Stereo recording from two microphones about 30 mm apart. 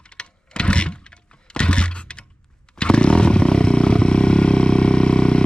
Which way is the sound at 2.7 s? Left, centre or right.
Left.